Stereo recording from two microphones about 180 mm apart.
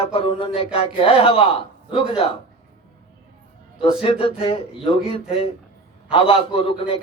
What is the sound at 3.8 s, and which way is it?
Speech, 30° left (ahead or behind).